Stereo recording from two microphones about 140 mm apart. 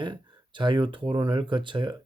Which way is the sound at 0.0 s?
35° right (ahead or behind).